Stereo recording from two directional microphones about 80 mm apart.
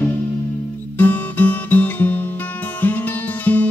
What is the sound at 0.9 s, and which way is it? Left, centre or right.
Guitar, left.